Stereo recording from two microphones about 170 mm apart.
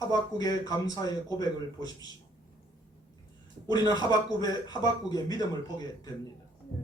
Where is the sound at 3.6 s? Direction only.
25° left (ahead or behind).